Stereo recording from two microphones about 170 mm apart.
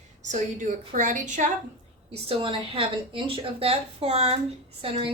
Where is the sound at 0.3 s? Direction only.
45° right (ahead or behind).